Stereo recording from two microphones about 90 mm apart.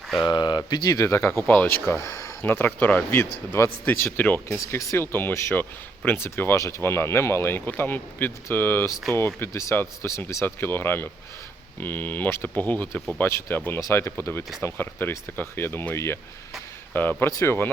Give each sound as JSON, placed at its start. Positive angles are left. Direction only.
{"t": 0.3, "sound": "speech", "side_deg": 50}
{"t": 0.9, "sound": "speech", "side_deg": 35}
{"t": 1.5, "sound": "speech", "side_deg": 15}
{"t": 2.0, "sound": "speech", "side_deg": 35}
{"t": 4.4, "sound": "speech", "side_deg": 35}